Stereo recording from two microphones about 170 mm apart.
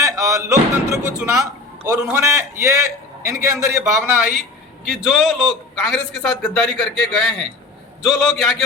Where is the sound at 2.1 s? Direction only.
15° right (ahead or behind).